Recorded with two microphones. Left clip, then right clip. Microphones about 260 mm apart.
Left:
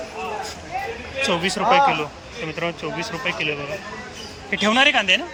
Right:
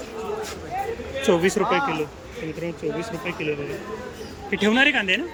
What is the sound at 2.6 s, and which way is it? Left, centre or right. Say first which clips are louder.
Speech: left 2 dB; centre.